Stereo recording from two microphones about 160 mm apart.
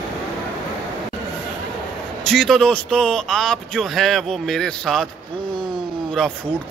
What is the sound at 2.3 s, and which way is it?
Speech, centre (ahead or behind).